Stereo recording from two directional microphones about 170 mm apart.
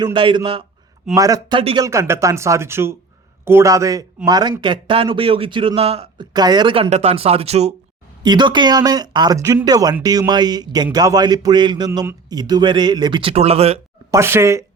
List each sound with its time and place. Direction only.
0.0 s a man's voice: 30° right (ahead or behind)
6.3 s a man's voice: 25° right (ahead or behind)
8.2 s speech: 25° right (ahead or behind)
14.1 s speech: 15° right (ahead or behind)